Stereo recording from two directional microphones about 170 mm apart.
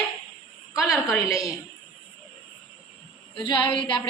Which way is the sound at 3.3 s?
30° left (ahead or behind).